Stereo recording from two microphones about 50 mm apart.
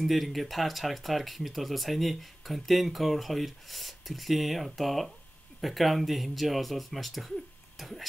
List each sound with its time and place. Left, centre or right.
0.0 s speech: centre